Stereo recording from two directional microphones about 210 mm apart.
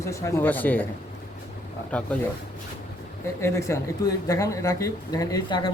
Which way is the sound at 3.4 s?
15° left (ahead or behind).